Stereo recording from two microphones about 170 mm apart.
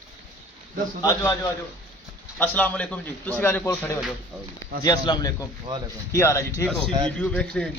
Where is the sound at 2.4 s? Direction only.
10° left (ahead or behind).